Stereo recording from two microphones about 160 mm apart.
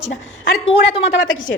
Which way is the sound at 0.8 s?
40° left (ahead or behind).